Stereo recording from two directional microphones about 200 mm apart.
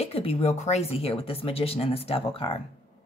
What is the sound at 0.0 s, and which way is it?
Speech, 30° left (ahead or behind).